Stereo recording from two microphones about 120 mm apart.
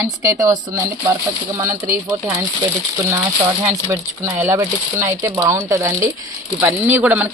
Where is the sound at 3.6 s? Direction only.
20° right (ahead or behind).